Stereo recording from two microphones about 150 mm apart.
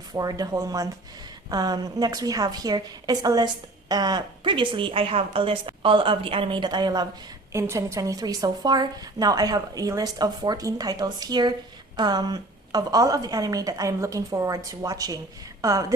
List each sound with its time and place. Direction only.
0.1 s a woman's voice: 25° right (ahead or behind)